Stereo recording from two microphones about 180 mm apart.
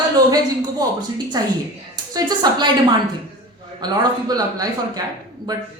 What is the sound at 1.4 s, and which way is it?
A man's voice, 20° right (ahead or behind).